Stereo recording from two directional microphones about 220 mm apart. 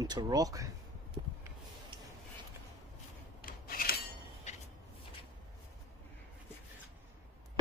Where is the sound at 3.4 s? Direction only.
40° left (ahead or behind).